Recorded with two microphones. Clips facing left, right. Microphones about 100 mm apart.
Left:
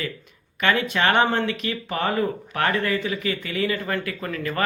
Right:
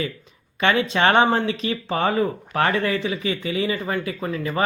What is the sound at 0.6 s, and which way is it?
Speech, 25° right (ahead or behind).